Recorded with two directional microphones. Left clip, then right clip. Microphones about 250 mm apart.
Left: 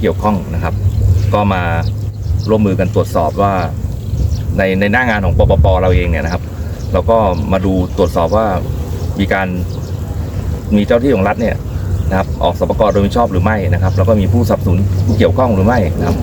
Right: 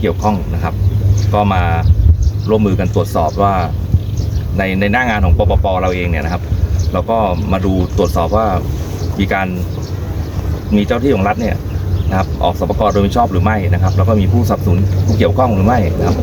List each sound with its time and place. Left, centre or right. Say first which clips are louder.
0.0 s speech: left 1 dB; centre
10.7 s speech: left 3 dB; centre